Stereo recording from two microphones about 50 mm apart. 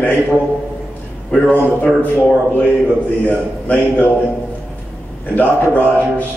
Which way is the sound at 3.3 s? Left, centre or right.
Left.